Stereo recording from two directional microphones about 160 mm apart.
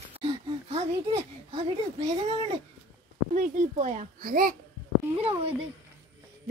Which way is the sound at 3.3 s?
50° right (ahead or behind).